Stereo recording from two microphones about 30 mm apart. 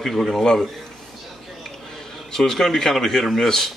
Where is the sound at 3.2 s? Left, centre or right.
Centre.